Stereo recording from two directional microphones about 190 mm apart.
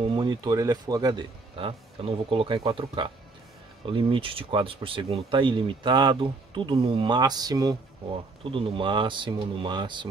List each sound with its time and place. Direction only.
0.1 s speech: 25° right (ahead or behind)